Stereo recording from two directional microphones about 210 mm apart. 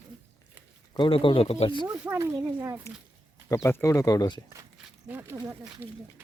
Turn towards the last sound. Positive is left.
turn(degrees=-10)  # may be behind; listen again after turning